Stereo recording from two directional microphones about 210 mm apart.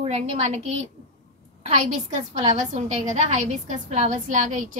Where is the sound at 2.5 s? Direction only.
35° right (ahead or behind).